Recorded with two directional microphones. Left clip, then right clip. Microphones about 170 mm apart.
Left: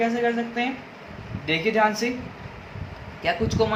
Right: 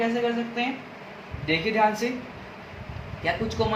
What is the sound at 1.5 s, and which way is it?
Speech, 35° left (ahead or behind).